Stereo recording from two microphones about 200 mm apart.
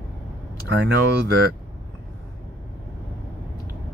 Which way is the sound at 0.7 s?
55° right (ahead or behind).